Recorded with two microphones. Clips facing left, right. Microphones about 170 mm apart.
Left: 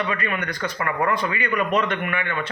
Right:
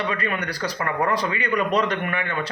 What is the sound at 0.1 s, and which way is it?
Speech, 35° right (ahead or behind).